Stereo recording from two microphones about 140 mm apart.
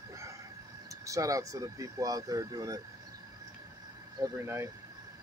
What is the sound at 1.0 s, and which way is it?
Speech, 25° right (ahead or behind).